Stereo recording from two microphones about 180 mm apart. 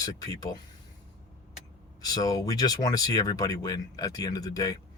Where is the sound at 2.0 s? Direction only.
20° left (ahead or behind).